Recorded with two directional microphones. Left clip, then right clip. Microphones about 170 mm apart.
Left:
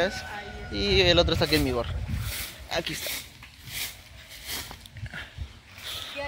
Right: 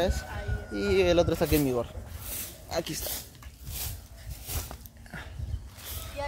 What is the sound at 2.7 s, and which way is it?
Speech, 20° right (ahead or behind).